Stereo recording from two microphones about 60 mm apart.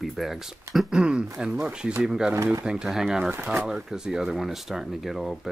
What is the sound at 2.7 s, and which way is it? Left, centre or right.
Speech, centre.